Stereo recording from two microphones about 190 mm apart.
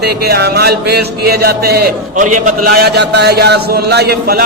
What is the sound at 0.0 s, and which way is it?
Speech, 60° right (ahead or behind).